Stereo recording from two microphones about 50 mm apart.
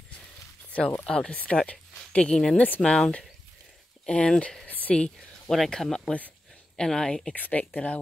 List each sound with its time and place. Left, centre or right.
0.7 s a sound: left
1.0 s speech: centre
1.3 s speech: left
1.7 s a sound: left
2.5 s speech: left
2.8 s speech: centre
4.6 s a sound: left
5.5 s speech: centre
7.3 s speech: left